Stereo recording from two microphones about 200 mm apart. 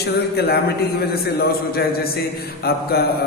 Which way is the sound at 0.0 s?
50° left (ahead or behind).